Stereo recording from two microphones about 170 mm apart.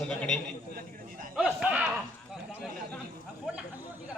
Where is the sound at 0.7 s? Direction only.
55° right (ahead or behind).